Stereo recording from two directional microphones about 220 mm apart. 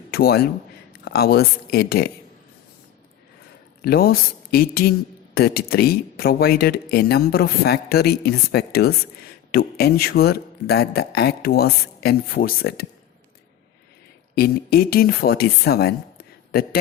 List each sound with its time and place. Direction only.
0.1 s a man's voice: 45° left (ahead or behind)
3.8 s a woman's voice: 45° left (ahead or behind)
14.3 s speech: 45° left (ahead or behind)